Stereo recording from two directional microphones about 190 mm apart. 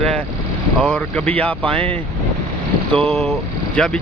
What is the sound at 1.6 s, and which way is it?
Speech, 30° right (ahead or behind).